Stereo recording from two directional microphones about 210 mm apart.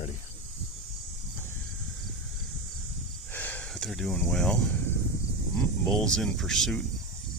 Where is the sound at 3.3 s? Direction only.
10° left (ahead or behind).